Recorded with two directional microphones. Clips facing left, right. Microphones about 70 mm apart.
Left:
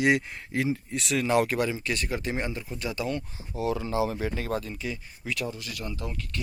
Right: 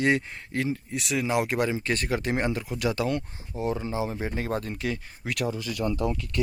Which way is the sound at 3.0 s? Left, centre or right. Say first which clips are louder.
Even; right.